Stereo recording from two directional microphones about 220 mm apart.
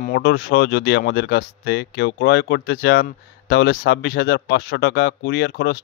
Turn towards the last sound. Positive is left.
turn(degrees=50)  # may be behind; listen again after turning